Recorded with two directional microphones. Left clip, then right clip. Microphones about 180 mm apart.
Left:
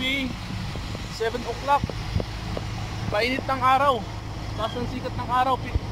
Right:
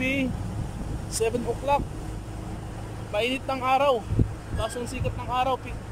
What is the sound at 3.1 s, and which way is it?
Speech, 20° right (ahead or behind).